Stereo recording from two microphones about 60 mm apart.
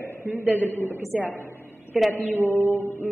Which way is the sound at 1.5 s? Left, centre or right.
Left.